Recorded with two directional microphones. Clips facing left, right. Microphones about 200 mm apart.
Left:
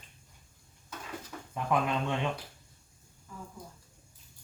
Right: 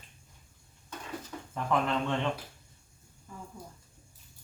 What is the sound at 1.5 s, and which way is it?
Speech, 15° left (ahead or behind).